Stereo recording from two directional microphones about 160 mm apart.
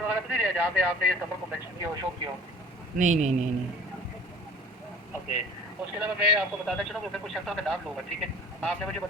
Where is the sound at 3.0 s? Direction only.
50° right (ahead or behind).